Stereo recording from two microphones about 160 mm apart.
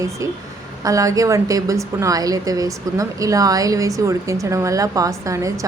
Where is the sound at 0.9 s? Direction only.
20° right (ahead or behind).